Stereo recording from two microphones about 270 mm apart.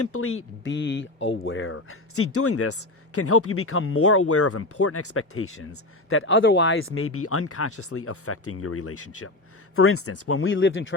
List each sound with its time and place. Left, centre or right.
0.0 s speech: left